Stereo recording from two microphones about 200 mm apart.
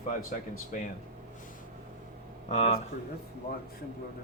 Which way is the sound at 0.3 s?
45° left (ahead or behind).